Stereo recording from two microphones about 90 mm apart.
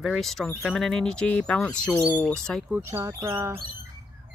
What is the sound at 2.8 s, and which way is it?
Speech, 30° right (ahead or behind).